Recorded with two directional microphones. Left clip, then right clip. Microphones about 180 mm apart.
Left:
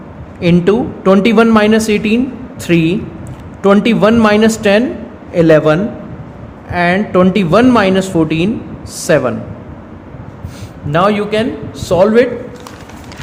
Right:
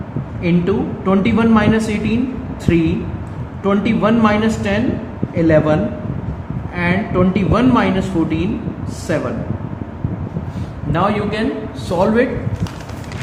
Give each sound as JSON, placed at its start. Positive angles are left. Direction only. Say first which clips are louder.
{"t": 0.4, "sound": "speech", "louder": "left 7 dB", "side_deg": 60}
{"t": 10.9, "sound": "a man's voice", "louder": "left 6 dB", "side_deg": 55}